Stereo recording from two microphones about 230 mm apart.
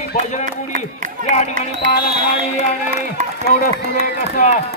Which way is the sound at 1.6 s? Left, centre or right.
Right.